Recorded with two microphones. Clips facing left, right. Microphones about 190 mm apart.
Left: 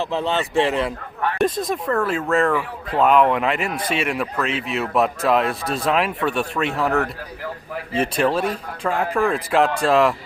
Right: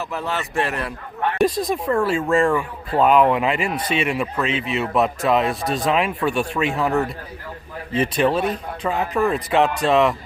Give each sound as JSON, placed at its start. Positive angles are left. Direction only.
{"t": 0.0, "sound": "speech", "side_deg": 25}
{"t": 1.5, "sound": "speech", "side_deg": 0}
{"t": 2.5, "sound": "speech", "side_deg": 0}
{"t": 8.0, "sound": "speech", "side_deg": 0}